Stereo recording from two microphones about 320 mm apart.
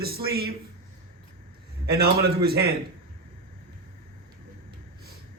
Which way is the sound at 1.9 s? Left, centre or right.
Right.